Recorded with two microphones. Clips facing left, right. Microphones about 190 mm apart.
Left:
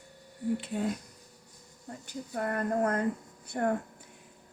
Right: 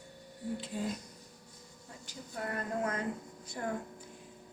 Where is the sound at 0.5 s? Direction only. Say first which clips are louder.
Left 5 dB; 65° left (ahead or behind).